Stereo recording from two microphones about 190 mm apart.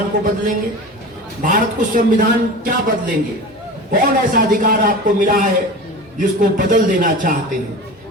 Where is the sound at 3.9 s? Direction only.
45° right (ahead or behind).